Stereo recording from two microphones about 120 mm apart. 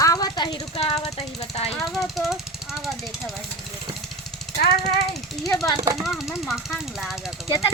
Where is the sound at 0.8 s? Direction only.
55° left (ahead or behind).